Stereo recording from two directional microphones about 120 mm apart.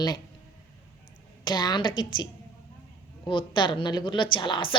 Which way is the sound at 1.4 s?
35° left (ahead or behind).